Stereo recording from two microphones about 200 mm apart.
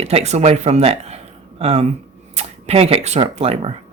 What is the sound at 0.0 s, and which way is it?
Speech, 30° right (ahead or behind).